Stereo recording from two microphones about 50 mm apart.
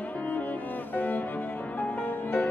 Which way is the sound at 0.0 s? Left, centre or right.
Left.